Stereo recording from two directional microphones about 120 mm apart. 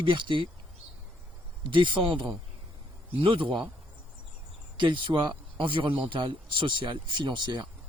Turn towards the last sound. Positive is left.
turn(degrees=-40)  # may be behind; listen again after turning